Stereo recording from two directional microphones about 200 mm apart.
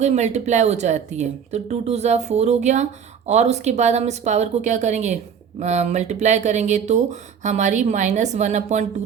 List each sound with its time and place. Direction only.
0.0 s speech: 35° right (ahead or behind)